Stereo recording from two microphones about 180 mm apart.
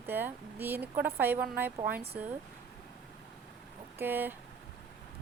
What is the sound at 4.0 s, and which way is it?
Speech, 10° right (ahead or behind).